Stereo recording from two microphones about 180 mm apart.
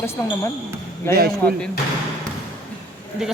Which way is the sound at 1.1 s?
60° right (ahead or behind).